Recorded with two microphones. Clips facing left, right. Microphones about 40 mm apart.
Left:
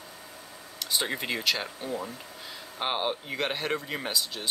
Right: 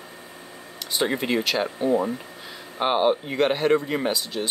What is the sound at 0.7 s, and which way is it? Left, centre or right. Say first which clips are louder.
Speech: right 6 dB; centre.